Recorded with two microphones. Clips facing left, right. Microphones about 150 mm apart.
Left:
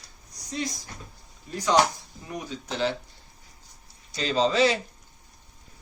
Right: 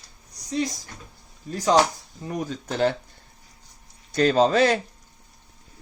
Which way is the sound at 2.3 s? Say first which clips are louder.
Right 5 dB; 45° right (ahead or behind).